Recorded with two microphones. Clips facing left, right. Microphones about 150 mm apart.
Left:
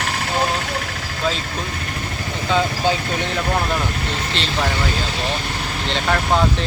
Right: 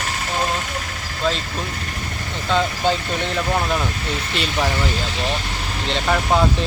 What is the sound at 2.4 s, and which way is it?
Speech, centre (ahead or behind).